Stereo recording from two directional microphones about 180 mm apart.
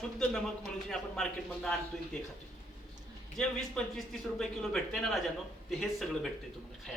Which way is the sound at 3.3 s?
5° left (ahead or behind).